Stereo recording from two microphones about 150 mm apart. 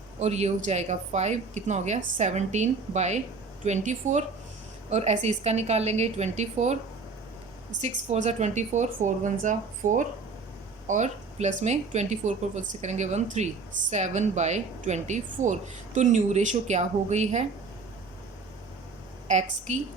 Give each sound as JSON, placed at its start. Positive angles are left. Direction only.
{"t": 0.2, "sound": "speech", "side_deg": -45}
{"t": 7.8, "sound": "speech", "side_deg": -50}
{"t": 19.3, "sound": "speech", "side_deg": -50}